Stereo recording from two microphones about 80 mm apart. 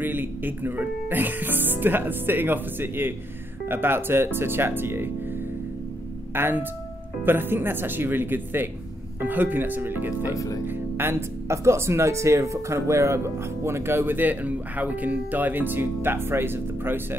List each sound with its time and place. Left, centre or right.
0.0 s speech: right
6.3 s speech: right
10.3 s speech: left
10.7 s speech: right